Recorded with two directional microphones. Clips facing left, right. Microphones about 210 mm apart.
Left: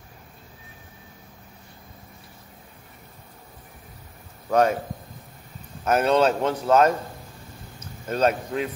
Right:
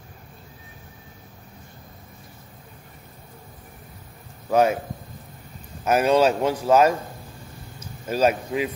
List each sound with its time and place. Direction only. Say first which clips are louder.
4.5 s speech: right 1 dB; 5° right (ahead or behind)
5.9 s speech: right 1 dB; 10° right (ahead or behind)